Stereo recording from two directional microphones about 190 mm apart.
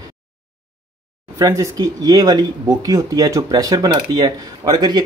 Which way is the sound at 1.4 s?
20° right (ahead or behind).